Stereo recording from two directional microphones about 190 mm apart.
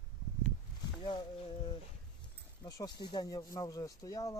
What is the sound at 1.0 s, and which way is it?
Speech, 25° left (ahead or behind).